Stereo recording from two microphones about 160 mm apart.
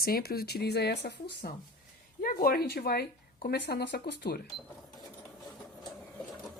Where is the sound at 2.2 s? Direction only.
65° left (ahead or behind); by 4.3 s 90° left.